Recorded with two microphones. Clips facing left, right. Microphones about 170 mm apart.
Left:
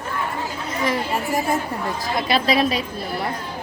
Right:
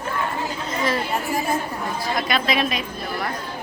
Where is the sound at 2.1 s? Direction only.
30° left (ahead or behind).